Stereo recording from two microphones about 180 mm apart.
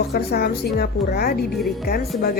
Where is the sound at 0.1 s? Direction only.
55° left (ahead or behind).